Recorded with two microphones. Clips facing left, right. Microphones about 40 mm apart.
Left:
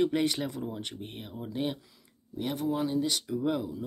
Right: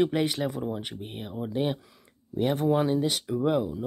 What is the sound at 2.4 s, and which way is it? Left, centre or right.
Speech, right.